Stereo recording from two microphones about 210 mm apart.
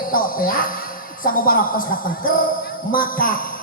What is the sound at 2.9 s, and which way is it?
Music, 40° left (ahead or behind).